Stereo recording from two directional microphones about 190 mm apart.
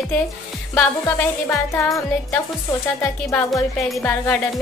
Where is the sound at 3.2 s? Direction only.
15° left (ahead or behind).